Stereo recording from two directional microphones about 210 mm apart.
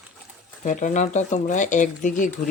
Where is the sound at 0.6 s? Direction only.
35° left (ahead or behind).